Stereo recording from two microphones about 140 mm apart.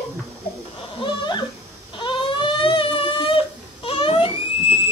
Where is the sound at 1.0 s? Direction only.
35° left (ahead or behind).